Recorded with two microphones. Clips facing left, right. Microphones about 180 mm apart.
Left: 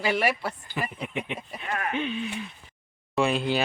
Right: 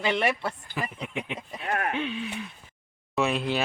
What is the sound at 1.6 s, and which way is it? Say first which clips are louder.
Speech: right 3 dB; 50° right (ahead or behind).